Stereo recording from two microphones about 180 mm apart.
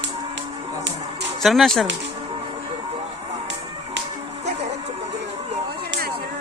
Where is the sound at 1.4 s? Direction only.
Centre (ahead or behind).